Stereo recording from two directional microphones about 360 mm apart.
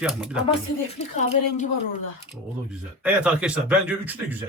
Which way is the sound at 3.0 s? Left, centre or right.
Centre.